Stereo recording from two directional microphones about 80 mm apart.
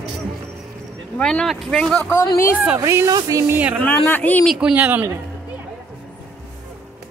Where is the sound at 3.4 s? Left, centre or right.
Right.